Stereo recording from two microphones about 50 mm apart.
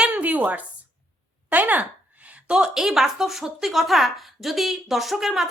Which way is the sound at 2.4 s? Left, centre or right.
Centre.